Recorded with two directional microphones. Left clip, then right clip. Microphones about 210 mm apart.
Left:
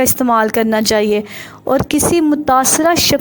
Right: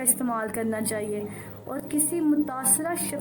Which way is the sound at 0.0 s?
40° left (ahead or behind).